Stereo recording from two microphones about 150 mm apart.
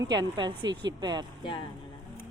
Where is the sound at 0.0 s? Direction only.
30° right (ahead or behind).